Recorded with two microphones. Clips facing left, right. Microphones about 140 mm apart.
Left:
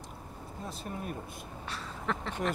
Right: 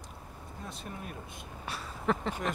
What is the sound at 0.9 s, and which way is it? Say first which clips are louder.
Speech: left 4 dB; 30° left (ahead or behind).